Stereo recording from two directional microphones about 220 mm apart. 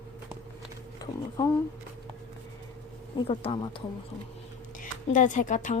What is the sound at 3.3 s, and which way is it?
Speech, 25° left (ahead or behind).